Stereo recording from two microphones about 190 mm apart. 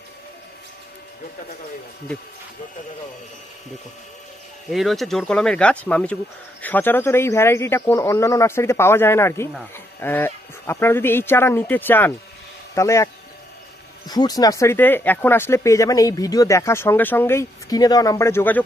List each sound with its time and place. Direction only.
4.7 s speech: centre (ahead or behind); by 13.1 s 15° left (ahead or behind)
14.1 s speech: 20° left (ahead or behind)